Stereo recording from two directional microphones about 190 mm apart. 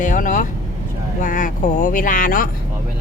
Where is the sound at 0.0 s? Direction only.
45° left (ahead or behind).